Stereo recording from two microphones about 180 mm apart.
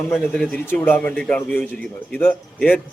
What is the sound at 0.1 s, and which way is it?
Speech, 10° left (ahead or behind).